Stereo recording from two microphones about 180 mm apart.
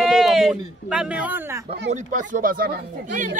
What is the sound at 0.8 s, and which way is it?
Speech, 5° right (ahead or behind).